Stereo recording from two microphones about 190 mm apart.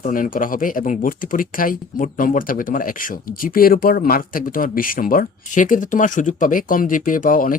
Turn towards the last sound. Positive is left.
turn(degrees=45)  # may be behind; listen again after turning